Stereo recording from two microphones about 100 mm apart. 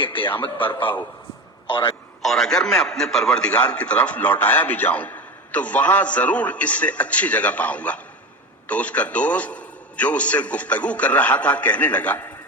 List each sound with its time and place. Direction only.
0.0 s a man's voice: 60° left (ahead or behind)
2.2 s a man's voice: 5° left (ahead or behind)